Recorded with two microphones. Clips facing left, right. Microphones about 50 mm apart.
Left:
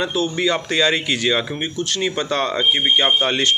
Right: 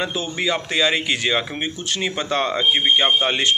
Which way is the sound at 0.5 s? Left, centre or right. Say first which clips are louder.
Even; centre.